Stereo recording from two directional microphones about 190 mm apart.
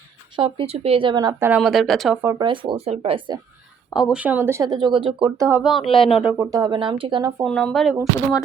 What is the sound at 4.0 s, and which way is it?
Speech, 5° right (ahead or behind).